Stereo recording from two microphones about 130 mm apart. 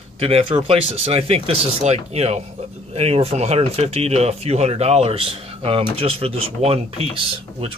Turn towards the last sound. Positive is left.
turn(degrees=-45)  # may be behind; listen again after turning